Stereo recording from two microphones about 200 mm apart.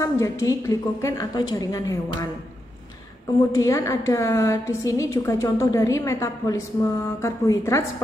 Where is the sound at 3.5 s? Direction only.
15° left (ahead or behind).